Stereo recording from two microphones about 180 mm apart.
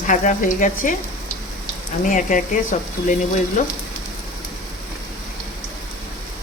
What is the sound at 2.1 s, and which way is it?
Speech, 45° left (ahead or behind).